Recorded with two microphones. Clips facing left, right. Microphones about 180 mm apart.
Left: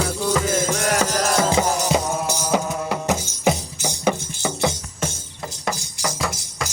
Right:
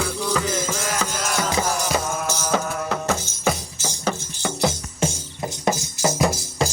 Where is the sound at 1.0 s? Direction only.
40° left (ahead or behind); by 4.5 s 15° left (ahead or behind).